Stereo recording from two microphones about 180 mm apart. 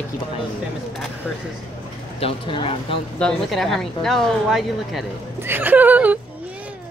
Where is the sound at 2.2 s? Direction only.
30° left (ahead or behind).